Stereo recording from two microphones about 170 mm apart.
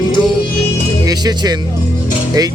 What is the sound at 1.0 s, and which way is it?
Speech, 20° right (ahead or behind).